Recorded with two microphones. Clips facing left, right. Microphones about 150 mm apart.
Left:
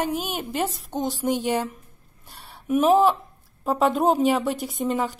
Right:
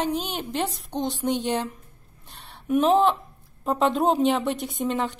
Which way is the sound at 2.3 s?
5° left (ahead or behind).